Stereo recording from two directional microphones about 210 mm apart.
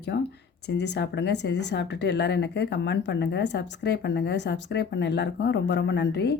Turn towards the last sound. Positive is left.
turn(degrees=55)  # may be behind; listen again after turning